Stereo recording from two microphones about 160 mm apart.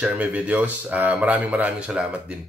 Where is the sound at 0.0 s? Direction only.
10° right (ahead or behind).